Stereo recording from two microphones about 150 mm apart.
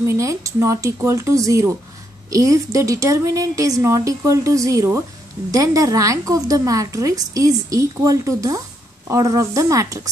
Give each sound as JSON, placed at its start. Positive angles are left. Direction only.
{"t": 0.0, "sound": "a woman's voice", "side_deg": -20}